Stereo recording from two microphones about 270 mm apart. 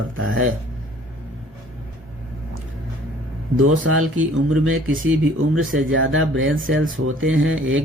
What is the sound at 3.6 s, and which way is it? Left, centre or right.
A man's voice, right.